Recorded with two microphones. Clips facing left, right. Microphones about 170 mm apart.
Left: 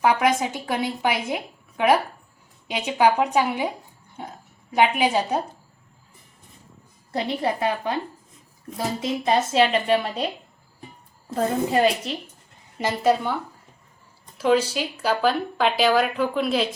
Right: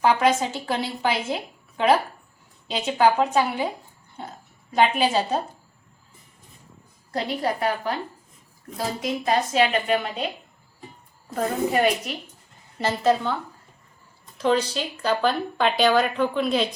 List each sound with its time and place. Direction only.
0.0 s a woman's voice: 10° left (ahead or behind)
2.6 s a woman's voice: 15° left (ahead or behind)
7.1 s a woman's voice: 20° left (ahead or behind)
9.0 s a woman's voice: 25° left (ahead or behind)
11.7 s a woman's voice: 30° left (ahead or behind)
12.8 s a woman's voice: 10° left (ahead or behind)
14.3 s speech: 5° left (ahead or behind)